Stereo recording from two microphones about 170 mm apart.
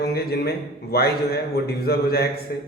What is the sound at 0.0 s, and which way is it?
A man's voice, 65° left (ahead or behind).